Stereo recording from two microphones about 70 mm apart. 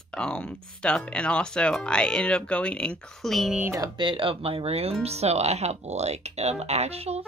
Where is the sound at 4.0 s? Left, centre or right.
Right.